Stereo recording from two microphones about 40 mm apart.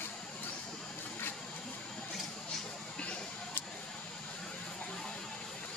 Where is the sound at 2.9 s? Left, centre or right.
Left.